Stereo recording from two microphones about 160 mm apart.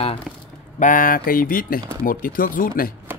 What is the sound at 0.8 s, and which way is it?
Speech, 55° left (ahead or behind).